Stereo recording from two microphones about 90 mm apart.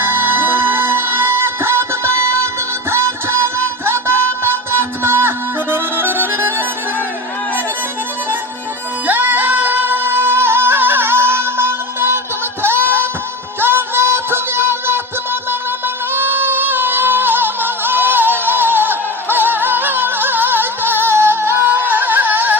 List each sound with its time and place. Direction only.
0.0 s music: 20° right (ahead or behind)
5.7 s accordion: 25° right (ahead or behind)
9.0 s singing: 20° right (ahead or behind)
12.6 s a sound: 25° right (ahead or behind)
13.6 s music: 25° right (ahead or behind)